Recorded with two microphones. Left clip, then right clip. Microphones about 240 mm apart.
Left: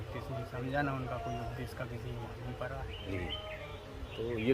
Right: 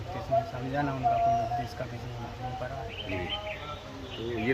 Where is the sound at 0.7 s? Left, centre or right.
Left.